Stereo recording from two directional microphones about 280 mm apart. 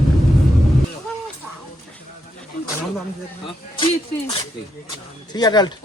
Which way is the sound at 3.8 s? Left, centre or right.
Centre.